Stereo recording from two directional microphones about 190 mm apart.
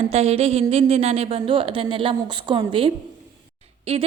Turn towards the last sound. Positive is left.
turn(degrees=-30)  # may be behind; listen again after turning